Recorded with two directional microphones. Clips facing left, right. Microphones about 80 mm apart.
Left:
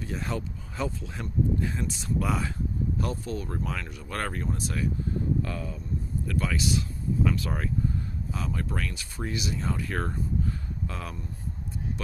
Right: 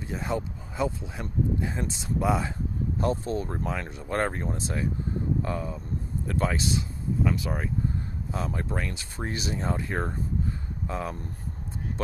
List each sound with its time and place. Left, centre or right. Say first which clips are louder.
0.0 s speech: right 2 dB; right
7.3 s speech: right 1 dB; centre
8.3 s speech: right 2 dB; right